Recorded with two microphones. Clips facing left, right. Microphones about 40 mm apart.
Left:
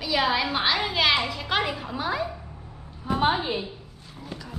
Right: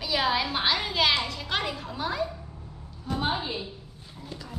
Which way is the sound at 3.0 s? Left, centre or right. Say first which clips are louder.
Left 6 dB; left.